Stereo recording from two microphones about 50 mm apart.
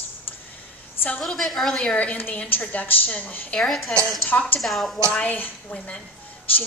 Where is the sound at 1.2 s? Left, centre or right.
Centre.